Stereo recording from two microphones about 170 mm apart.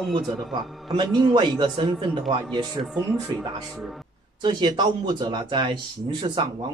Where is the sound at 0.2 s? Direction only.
Centre (ahead or behind).